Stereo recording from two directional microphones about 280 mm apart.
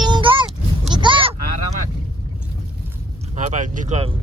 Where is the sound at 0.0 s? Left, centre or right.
Centre.